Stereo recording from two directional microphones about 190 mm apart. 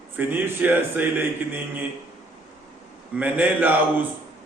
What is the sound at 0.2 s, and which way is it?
A man's voice, 10° right (ahead or behind).